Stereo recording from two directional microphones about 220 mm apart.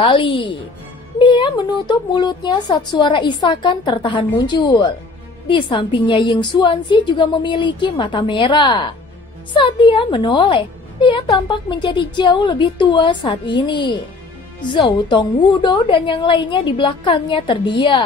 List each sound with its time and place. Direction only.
0.0 s a woman's voice: 25° left (ahead or behind)